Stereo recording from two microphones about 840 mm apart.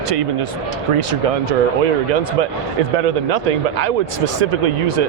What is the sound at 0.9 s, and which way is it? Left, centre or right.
Speech, right.